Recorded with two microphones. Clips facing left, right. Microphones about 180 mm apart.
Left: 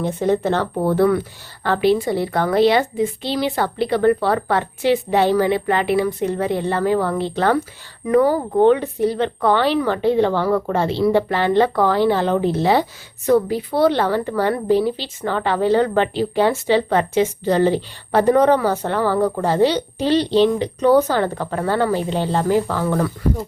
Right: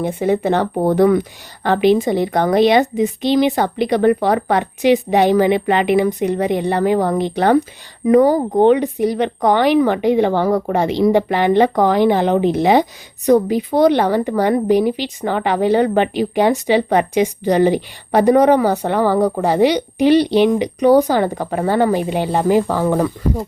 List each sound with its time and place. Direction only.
0.0 s a woman's voice: 10° right (ahead or behind)